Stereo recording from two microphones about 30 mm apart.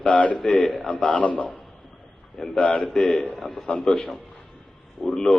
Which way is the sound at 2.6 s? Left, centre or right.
Left.